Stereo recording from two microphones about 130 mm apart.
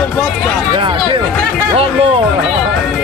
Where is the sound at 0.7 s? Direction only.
40° right (ahead or behind).